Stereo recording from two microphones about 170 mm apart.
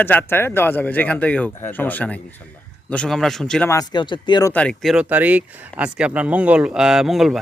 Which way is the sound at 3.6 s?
20° left (ahead or behind).